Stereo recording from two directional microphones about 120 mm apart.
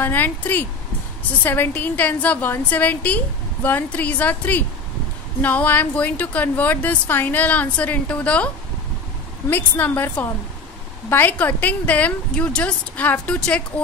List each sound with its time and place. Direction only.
0.0 s a woman's voice: 15° left (ahead or behind)
9.5 s a woman's voice: 15° left (ahead or behind)